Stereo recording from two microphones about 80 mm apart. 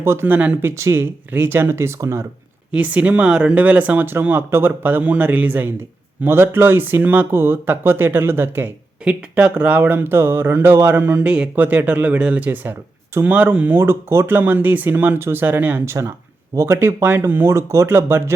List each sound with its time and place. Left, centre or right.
0.0 s speech: right
0.3 s speech: centre
0.6 s speech: right
2.7 s speech: centre
13.7 s speech: right
15.9 s speech: right